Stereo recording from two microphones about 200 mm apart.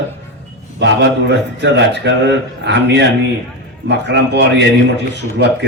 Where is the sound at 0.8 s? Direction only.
60° right (ahead or behind).